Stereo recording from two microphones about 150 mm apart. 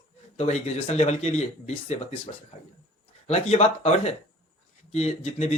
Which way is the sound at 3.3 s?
45° left (ahead or behind).